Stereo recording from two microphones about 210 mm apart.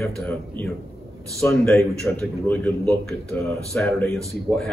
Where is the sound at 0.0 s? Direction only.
10° left (ahead or behind).